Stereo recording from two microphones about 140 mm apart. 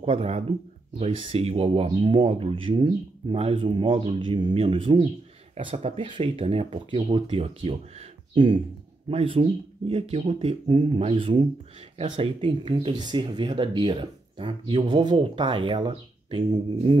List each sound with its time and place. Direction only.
0.0 s speech: 45° right (ahead or behind)
9.1 s speech: 40° right (ahead or behind)